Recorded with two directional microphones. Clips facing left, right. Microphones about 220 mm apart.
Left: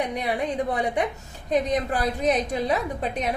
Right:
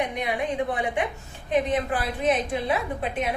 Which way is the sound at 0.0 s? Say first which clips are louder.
Left 1 dB; 35° left (ahead or behind).